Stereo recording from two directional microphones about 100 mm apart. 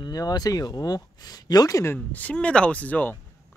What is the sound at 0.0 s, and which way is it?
Speech, 40° left (ahead or behind).